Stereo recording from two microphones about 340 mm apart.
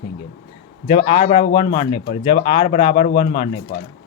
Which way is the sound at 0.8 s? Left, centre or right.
Centre.